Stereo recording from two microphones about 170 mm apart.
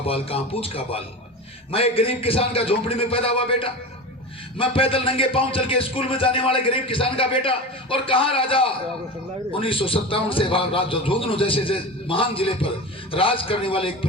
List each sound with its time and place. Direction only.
0.0 s a man's voice: 35° left (ahead or behind)